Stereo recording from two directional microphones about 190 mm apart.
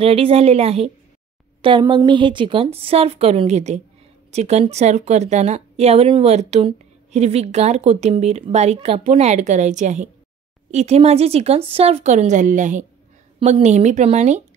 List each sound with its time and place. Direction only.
0.0 s a woman's voice: 30° right (ahead or behind)